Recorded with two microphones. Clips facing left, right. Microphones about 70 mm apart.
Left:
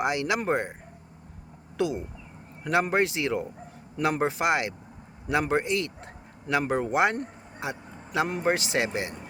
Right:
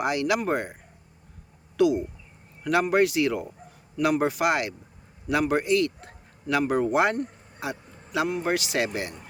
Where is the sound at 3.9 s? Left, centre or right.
Left.